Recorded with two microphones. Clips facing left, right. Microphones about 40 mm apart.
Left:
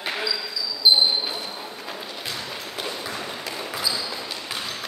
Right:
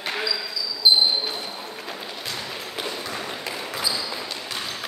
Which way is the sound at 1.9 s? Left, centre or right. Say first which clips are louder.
Even; centre.